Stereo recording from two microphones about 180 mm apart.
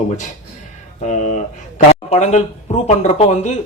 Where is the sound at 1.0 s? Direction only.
40° left (ahead or behind).